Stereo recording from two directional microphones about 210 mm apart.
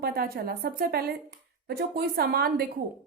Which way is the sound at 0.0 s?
45° right (ahead or behind).